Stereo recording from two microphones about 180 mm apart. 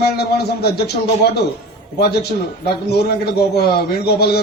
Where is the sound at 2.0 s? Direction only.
65° left (ahead or behind).